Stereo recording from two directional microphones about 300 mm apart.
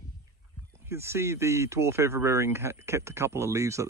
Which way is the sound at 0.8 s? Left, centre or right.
Centre.